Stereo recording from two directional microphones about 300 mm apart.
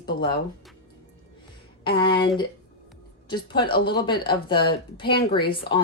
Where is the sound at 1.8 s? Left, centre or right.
Centre.